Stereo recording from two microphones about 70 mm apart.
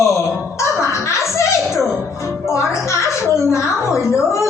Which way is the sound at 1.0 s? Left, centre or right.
Left.